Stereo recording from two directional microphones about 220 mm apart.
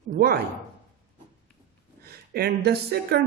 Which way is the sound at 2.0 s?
45° right (ahead or behind).